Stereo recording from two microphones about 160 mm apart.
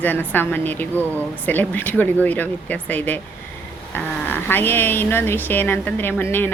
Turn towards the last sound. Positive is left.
turn(degrees=10)  # may be behind; listen again after turning